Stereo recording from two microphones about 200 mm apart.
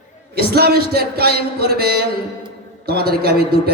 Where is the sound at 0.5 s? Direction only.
50° right (ahead or behind).